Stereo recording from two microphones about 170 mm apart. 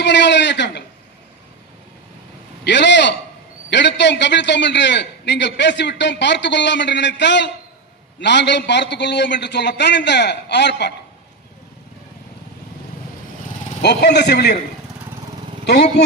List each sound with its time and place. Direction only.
0.0 s a man's voice: 90° left
2.6 s a man's voice: 90° left
13.8 s a man's voice: 80° left